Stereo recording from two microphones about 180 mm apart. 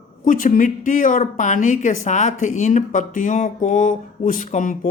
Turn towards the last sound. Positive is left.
turn(degrees=45)  # may be behind; listen again after turning